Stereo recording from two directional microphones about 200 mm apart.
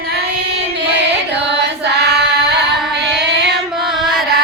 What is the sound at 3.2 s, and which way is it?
Child singing, 60° right (ahead or behind).